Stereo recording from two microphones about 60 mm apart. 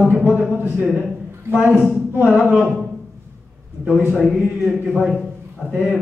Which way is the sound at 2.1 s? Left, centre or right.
Right.